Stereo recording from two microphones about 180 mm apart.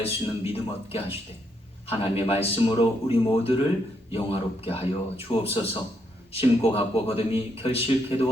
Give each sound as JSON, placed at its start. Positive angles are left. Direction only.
{"t": 0.0, "sound": "a man's voice", "side_deg": 30}